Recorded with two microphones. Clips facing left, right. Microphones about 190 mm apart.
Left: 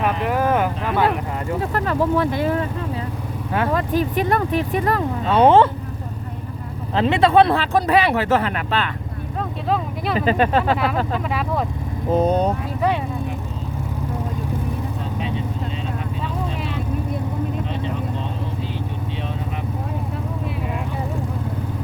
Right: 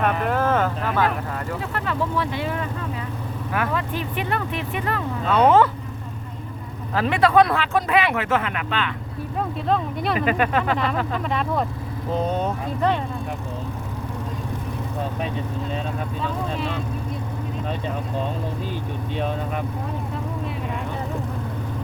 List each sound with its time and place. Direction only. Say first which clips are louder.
0.0 s speech: left 1 dB; 10° left (ahead or behind)
1.7 s speech: left 6 dB; 40° left (ahead or behind)
6.9 s speech: left 2 dB; 25° left (ahead or behind)
9.6 s speech: left 1 dB; 5° left (ahead or behind)
10.2 s speech: left 5 dB; 30° left (ahead or behind)
11.3 s speech: even; 5° left (ahead or behind)
12.2 s speech: left 6 dB; 40° left (ahead or behind)